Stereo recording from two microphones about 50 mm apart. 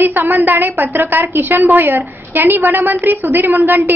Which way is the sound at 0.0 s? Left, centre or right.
Right.